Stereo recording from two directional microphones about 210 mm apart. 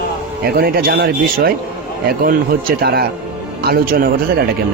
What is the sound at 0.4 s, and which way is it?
Speech, 45° right (ahead or behind).